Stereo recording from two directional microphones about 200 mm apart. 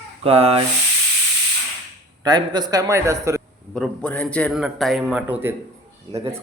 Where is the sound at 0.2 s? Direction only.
30° right (ahead or behind).